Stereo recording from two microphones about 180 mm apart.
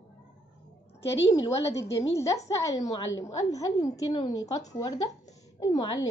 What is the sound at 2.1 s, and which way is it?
A woman's voice, 15° left (ahead or behind).